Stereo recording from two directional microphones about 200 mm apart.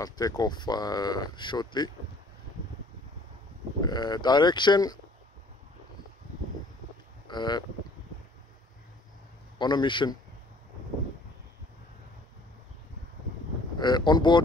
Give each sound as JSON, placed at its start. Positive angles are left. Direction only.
{"t": 0.0, "sound": "speech", "side_deg": 20}
{"t": 3.8, "sound": "speech", "side_deg": 20}
{"t": 7.2, "sound": "speech", "side_deg": 20}
{"t": 9.6, "sound": "speech", "side_deg": 20}
{"t": 13.7, "sound": "speech", "side_deg": 20}